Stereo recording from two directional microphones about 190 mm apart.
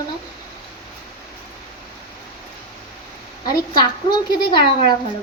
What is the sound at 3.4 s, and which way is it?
A woman's voice, 25° left (ahead or behind).